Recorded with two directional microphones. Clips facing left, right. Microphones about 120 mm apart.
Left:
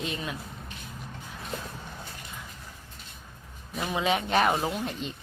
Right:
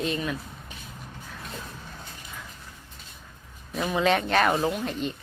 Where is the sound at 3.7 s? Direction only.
5° left (ahead or behind).